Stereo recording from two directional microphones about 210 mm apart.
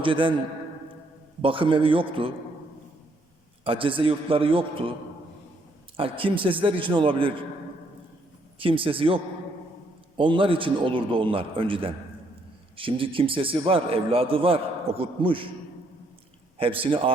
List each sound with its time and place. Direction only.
0.0 s a man's voice: 25° right (ahead or behind)
1.4 s a man's voice: 25° right (ahead or behind)
3.6 s a man's voice: 25° right (ahead or behind)
6.0 s a man's voice: 25° right (ahead or behind)
8.5 s a man's voice: 25° right (ahead or behind)
16.6 s a man's voice: 25° right (ahead or behind)